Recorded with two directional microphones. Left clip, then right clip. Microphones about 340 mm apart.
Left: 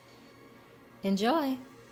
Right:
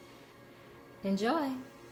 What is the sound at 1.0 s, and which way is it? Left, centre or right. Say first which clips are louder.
Speech: left 3 dB; left.